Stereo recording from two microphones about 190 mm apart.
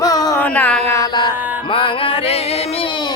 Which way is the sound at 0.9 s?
20° left (ahead or behind).